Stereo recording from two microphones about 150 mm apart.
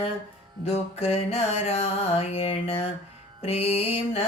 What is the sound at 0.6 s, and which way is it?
Music, 45° left (ahead or behind).